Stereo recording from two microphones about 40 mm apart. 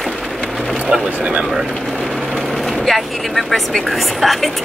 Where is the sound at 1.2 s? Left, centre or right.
Right.